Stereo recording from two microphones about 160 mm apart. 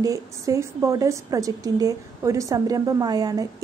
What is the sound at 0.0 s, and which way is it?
A woman's voice, 20° right (ahead or behind).